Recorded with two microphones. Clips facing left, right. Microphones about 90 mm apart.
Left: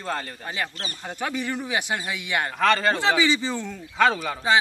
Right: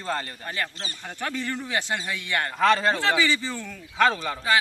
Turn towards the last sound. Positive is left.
turn(degrees=5)  # may be behind; listen again after turning